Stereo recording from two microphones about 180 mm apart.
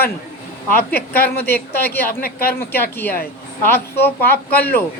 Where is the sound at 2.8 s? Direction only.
10° left (ahead or behind).